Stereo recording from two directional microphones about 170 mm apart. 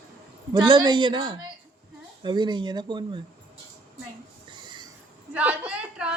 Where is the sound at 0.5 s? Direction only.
25° right (ahead or behind).